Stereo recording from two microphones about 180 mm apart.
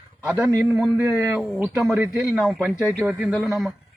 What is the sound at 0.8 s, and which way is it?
A man's voice, 5° right (ahead or behind).